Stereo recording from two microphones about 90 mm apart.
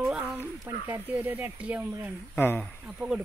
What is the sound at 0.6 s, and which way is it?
Speech, 30° right (ahead or behind).